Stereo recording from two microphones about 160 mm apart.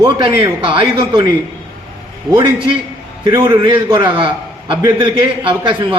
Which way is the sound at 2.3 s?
35° right (ahead or behind).